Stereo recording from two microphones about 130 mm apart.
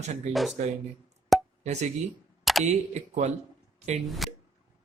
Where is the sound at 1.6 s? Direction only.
60° right (ahead or behind).